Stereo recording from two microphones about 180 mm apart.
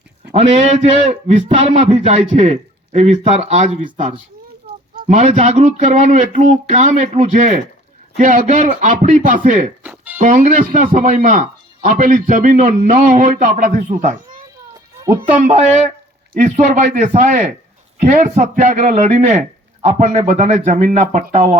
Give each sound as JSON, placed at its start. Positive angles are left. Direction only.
{"t": 0.3, "sound": "a man's voice", "side_deg": -40}
{"t": 9.8, "sound": "music", "side_deg": -10}
{"t": 10.2, "sound": "speech", "side_deg": -45}
{"t": 15.4, "sound": "a man's voice", "side_deg": -40}